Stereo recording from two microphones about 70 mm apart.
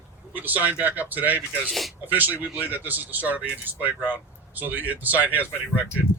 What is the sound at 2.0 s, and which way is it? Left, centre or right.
Speech, right.